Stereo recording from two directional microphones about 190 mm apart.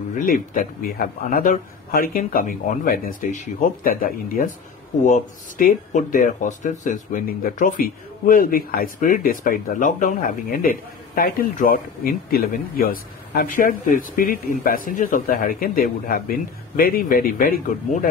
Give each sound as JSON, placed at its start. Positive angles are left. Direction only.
{"t": 0.2, "sound": "speech", "side_deg": 50}